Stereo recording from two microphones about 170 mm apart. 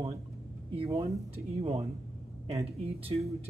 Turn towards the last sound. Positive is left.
turn(degrees=-40)  # may be behind; listen again after turning